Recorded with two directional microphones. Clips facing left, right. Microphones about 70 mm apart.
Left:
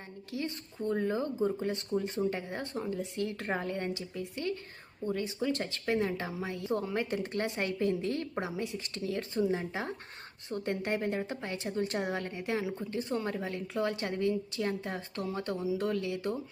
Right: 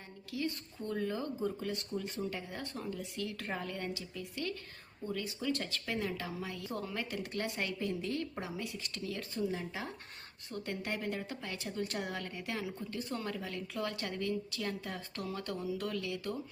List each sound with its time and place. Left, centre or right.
0.3 s a woman's voice: left
15.8 s a woman's voice: left